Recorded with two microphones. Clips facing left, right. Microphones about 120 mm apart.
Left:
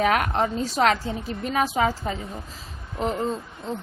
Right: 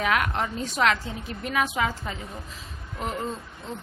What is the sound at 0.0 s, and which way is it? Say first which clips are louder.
A woman's voice: left 4 dB; 40° left (ahead or behind).